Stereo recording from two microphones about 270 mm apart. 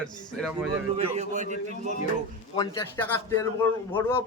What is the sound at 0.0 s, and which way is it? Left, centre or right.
Speech, centre.